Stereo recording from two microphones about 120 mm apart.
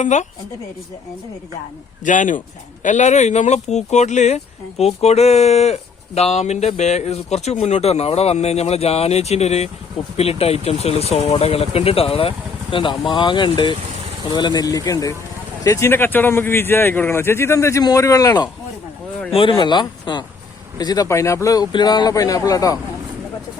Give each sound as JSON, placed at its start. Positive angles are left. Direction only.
{"t": 0.0, "sound": "speech", "side_deg": 85}
{"t": 2.0, "sound": "speech", "side_deg": 90}
{"t": 4.8, "sound": "speech", "side_deg": 60}
{"t": 19.3, "sound": "speech", "side_deg": 45}